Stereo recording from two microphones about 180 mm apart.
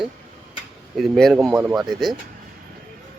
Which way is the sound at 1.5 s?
15° right (ahead or behind).